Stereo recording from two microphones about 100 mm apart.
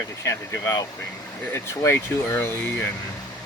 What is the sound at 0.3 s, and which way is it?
Speech, 30° left (ahead or behind).